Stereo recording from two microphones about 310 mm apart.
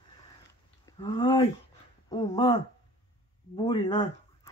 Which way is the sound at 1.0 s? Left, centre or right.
Centre.